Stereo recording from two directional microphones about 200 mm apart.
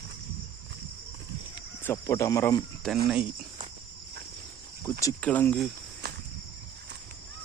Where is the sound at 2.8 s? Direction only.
5° left (ahead or behind).